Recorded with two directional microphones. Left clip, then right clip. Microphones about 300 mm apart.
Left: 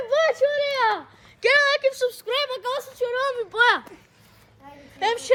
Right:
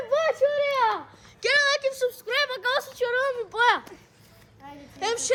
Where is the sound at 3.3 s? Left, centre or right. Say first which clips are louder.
Left 3 dB; left.